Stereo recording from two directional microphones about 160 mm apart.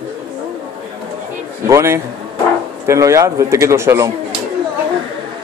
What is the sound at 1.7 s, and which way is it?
A man's voice, 15° right (ahead or behind).